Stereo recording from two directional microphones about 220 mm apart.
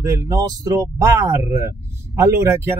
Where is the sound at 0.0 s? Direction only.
15° right (ahead or behind).